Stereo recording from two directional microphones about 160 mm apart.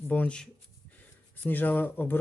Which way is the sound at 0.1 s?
10° left (ahead or behind).